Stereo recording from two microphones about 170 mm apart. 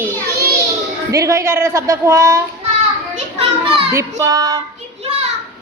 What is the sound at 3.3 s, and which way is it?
Children playing, 35° right (ahead or behind).